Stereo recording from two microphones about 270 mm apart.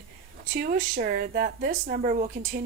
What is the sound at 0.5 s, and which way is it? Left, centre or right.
Speech, right.